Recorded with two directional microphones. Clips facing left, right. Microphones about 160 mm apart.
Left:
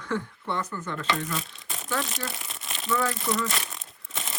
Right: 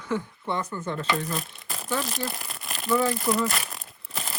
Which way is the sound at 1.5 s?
Centre (ahead or behind).